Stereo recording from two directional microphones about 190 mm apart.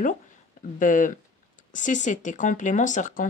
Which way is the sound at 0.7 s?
45° left (ahead or behind).